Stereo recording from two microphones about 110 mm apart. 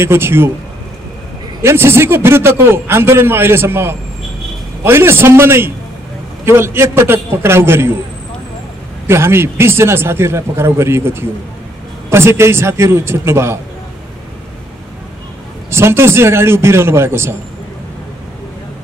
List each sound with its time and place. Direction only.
0.0 s a man's voice: 20° right (ahead or behind)
1.6 s a man's voice: 20° right (ahead or behind)
9.0 s a man's voice: 25° right (ahead or behind)
15.7 s a man's voice: 25° right (ahead or behind)